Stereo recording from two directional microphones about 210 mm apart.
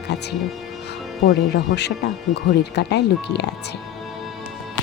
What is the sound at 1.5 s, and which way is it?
Speech, 55° left (ahead or behind).